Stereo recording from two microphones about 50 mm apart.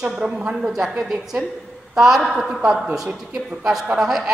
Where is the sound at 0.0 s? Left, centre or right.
Right.